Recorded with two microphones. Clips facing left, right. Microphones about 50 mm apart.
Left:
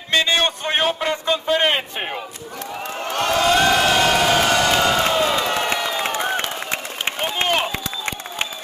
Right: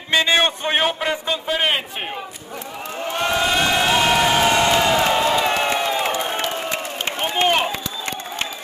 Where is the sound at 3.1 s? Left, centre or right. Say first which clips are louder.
Left 1 dB; centre.